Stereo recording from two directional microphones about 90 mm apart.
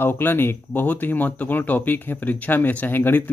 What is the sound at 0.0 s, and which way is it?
A man's voice, 25° left (ahead or behind).